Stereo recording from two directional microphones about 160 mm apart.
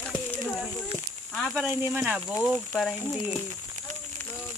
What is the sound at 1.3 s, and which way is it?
Speech, 5° left (ahead or behind).